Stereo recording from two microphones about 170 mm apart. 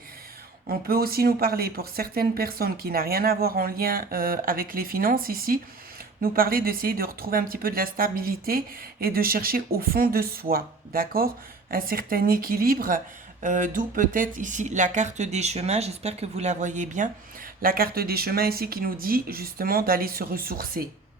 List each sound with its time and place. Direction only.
0.7 s speech: 65° right (ahead or behind); by 17.1 s 45° right (ahead or behind)
17.6 s speech: 60° right (ahead or behind)